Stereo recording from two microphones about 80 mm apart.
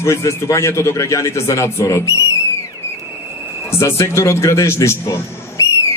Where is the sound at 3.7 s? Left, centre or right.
Left.